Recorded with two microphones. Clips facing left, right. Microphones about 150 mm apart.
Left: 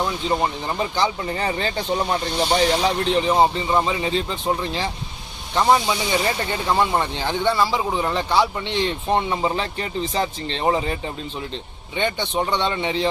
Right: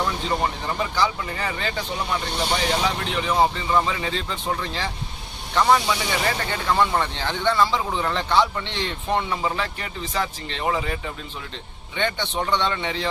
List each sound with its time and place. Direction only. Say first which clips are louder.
0.0 s speech: left 2 dB; 20° left (ahead or behind)
11.9 s speech: left 3 dB; 15° left (ahead or behind)